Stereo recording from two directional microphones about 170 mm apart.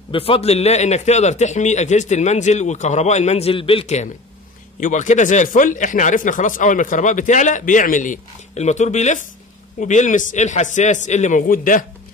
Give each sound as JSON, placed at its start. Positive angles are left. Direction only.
{"t": 0.1, "sound": "a man's voice", "side_deg": 35}